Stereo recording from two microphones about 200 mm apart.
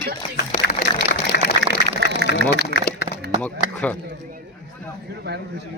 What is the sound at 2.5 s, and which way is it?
Speech, 55° left (ahead or behind).